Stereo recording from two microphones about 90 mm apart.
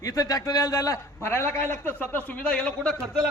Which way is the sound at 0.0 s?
40° left (ahead or behind).